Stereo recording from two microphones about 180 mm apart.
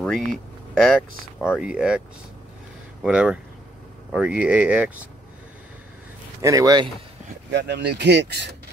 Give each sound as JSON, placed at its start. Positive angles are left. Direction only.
{"t": 0.0, "sound": "speech", "side_deg": 0}
{"t": 6.4, "sound": "speech", "side_deg": -20}
{"t": 7.5, "sound": "speech", "side_deg": -70}